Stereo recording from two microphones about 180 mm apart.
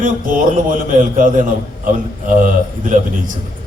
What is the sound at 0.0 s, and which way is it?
A man's voice, 50° right (ahead or behind).